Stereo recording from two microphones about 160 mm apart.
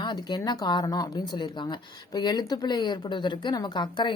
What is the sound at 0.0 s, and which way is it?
Speech, 25° left (ahead or behind).